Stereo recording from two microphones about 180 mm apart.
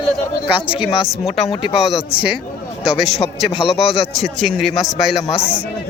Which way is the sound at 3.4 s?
30° left (ahead or behind).